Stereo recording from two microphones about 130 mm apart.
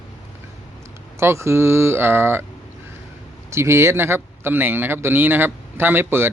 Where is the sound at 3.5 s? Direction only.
20° right (ahead or behind).